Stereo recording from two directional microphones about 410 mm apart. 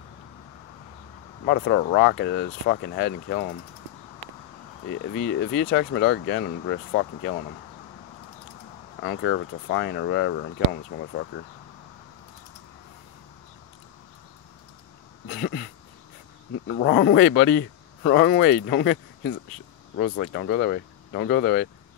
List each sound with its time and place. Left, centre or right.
1.4 s speech: left
4.8 s speech: left
9.0 s speech: left
15.2 s a sound: left
16.6 s speech: left